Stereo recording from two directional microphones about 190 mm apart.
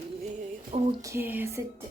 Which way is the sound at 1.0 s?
15° right (ahead or behind).